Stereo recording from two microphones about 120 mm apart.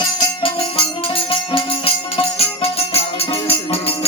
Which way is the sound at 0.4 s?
50° left (ahead or behind).